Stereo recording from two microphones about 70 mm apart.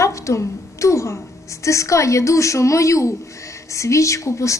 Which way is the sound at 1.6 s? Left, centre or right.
Left.